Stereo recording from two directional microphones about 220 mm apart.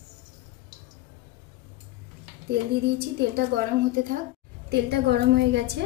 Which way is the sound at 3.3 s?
40° right (ahead or behind).